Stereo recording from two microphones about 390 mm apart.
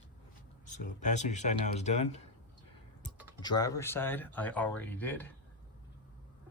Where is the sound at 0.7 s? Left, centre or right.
Centre.